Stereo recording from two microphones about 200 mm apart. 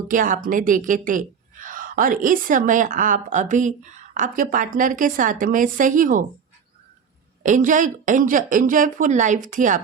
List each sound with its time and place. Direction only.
0.1 s a woman's voice: 40° right (ahead or behind)
7.4 s a woman's voice: 40° right (ahead or behind)